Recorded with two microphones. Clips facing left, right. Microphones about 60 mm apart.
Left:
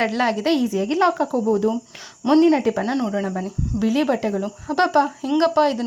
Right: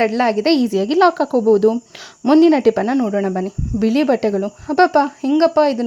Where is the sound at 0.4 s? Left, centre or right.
Right.